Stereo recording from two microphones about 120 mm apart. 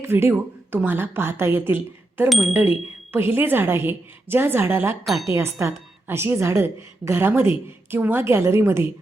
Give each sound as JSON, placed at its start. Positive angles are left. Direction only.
{"t": 0.0, "sound": "a woman's voice", "side_deg": -20}